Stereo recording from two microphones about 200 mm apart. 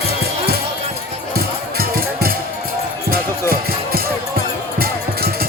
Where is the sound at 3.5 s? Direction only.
50° right (ahead or behind).